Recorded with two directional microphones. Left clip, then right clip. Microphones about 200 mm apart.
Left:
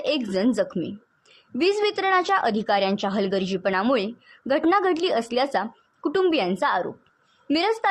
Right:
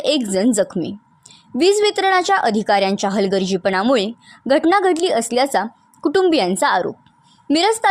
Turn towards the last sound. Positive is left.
turn(degrees=-45)  # may be behind; listen again after turning